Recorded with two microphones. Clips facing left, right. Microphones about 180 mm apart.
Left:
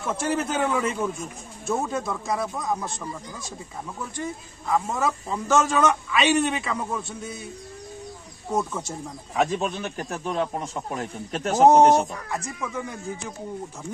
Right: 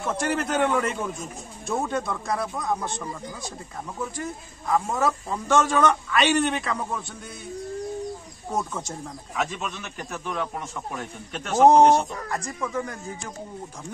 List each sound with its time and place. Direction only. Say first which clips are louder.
0.2 s speech: right 1 dB; centre (ahead or behind)
4.2 s speech: left 1 dB; centre (ahead or behind)
9.4 s a man's voice: left 6 dB; 35° left (ahead or behind)
12.3 s speech: right 1 dB; 5° left (ahead or behind)